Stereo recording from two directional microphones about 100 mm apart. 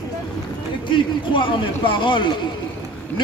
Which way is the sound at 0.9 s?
55° left (ahead or behind).